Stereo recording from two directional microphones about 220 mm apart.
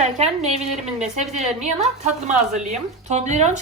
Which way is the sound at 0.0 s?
30° right (ahead or behind).